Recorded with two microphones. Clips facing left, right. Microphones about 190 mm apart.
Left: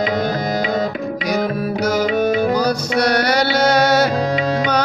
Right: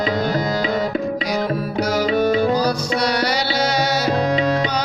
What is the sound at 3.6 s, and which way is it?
Music, 50° left (ahead or behind).